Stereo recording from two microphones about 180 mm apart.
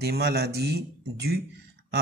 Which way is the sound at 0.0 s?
60° right (ahead or behind).